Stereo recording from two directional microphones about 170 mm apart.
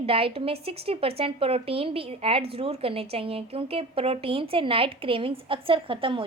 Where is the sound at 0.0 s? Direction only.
35° right (ahead or behind).